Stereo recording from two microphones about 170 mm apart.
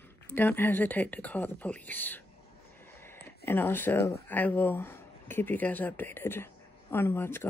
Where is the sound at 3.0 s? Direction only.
15° left (ahead or behind).